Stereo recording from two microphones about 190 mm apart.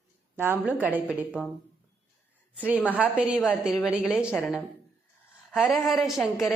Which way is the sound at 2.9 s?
5° right (ahead or behind).